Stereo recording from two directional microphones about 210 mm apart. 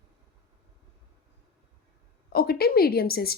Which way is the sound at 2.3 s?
45° left (ahead or behind).